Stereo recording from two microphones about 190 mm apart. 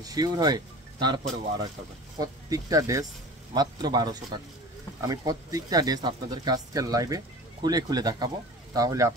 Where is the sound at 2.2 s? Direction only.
20° right (ahead or behind).